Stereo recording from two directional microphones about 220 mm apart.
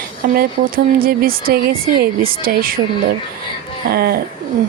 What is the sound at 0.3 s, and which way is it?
Speech, 40° right (ahead or behind).